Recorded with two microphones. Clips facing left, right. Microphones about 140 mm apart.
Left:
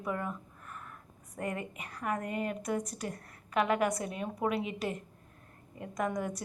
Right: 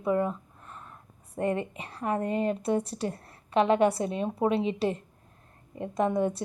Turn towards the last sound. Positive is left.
turn(degrees=-30)  # may be behind; listen again after turning